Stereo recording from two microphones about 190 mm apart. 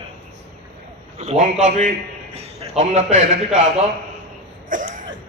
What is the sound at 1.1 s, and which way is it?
A man's voice, 35° right (ahead or behind).